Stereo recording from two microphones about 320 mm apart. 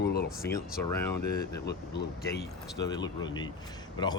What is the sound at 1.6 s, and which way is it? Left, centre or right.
Speech, left.